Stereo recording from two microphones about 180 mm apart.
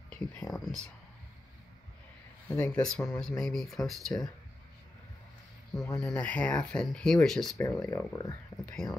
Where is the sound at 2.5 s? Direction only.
5° left (ahead or behind).